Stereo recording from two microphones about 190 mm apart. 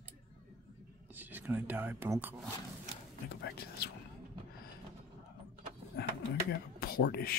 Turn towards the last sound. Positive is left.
turn(degrees=55)  # may be behind; listen again after turning